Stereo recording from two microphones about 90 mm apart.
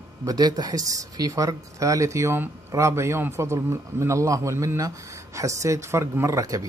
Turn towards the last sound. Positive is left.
turn(degrees=-35)  # may be behind; listen again after turning